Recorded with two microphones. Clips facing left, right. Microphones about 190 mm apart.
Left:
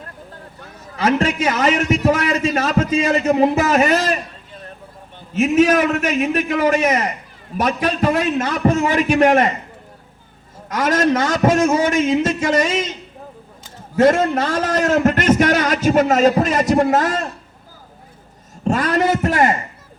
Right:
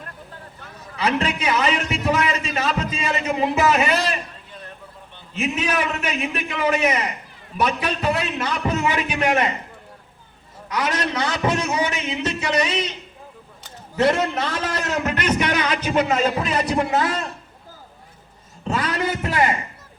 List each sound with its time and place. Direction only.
0.9 s a man's voice: 45° left (ahead or behind)
10.7 s a man's voice: 45° left (ahead or behind)
18.6 s a sound: 45° left (ahead or behind)